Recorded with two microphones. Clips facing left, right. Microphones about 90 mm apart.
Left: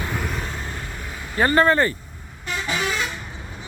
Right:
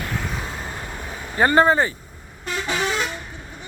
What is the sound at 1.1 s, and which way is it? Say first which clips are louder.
Vehicle: right 2 dB; 30° right (ahead or behind).